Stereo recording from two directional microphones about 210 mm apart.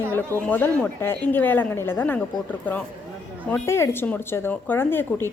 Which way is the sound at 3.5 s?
10° left (ahead or behind).